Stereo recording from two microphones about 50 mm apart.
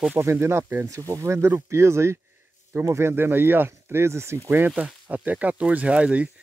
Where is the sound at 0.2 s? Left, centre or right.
Right.